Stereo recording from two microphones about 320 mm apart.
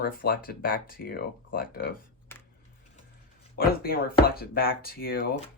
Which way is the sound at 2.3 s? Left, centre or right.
Centre.